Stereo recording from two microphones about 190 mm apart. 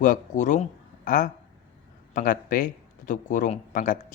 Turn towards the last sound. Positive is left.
turn(degrees=45)  # may be behind; listen again after turning